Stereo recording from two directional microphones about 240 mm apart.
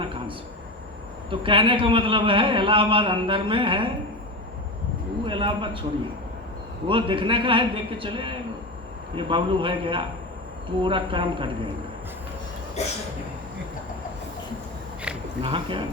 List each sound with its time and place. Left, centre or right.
1.3 s speech: right
5.2 s a man's voice: right
6.8 s speech: right
12.8 s a sound: left
15.4 s speech: right